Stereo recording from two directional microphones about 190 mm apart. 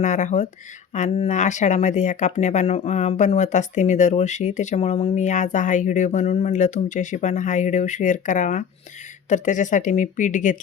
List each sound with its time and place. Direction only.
0.0 s speech: 40° left (ahead or behind)